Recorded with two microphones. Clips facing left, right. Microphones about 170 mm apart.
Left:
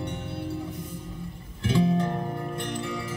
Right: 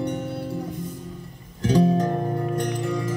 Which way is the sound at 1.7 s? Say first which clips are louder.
Right 4 dB; 40° right (ahead or behind).